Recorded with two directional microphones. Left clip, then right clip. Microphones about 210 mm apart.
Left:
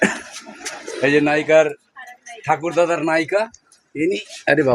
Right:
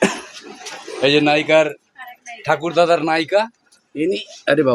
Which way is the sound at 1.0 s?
20° right (ahead or behind).